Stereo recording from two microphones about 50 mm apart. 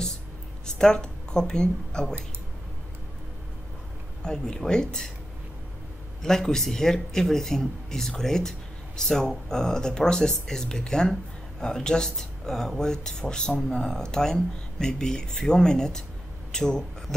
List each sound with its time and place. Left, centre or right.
0.7 s speech: centre
4.2 s speech: centre
6.2 s speech: centre